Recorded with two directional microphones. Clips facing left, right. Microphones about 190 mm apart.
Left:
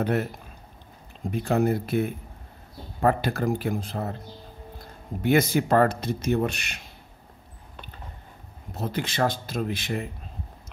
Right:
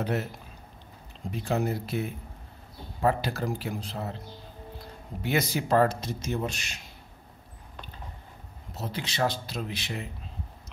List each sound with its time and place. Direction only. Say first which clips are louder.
0.0 s speech: left 5 dB; 55° left (ahead or behind)
1.3 s speech: left 5 dB; 55° left (ahead or behind)
8.7 s speech: left 4 dB; 50° left (ahead or behind)